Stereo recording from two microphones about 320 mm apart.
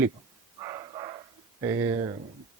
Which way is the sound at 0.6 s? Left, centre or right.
Centre.